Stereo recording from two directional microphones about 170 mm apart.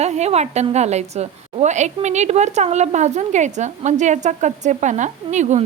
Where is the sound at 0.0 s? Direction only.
40° right (ahead or behind).